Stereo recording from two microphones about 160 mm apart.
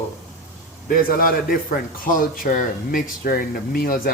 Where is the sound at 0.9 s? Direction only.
65° left (ahead or behind).